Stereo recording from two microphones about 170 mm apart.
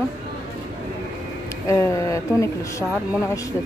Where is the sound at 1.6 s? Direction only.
15° left (ahead or behind).